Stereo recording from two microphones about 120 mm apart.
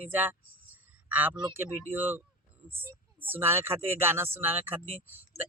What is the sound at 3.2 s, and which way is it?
Speech, 20° right (ahead or behind).